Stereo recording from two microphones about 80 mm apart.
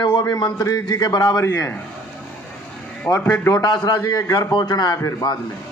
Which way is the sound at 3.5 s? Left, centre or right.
Left.